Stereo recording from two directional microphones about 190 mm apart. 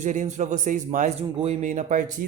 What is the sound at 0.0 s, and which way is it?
Speech, 40° right (ahead or behind).